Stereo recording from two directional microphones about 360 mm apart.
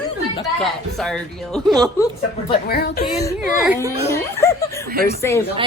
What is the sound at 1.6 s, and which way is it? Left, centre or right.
Speech, centre.